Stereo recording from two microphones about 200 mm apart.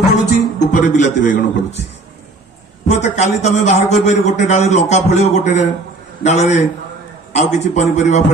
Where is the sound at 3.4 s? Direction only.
35° left (ahead or behind).